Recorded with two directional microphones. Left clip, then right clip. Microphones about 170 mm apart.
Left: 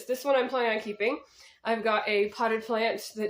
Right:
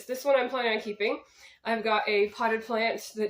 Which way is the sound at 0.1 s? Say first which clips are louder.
Even; 30° left (ahead or behind).